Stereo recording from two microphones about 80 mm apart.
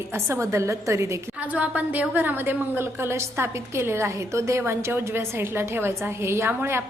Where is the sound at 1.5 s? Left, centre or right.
Centre.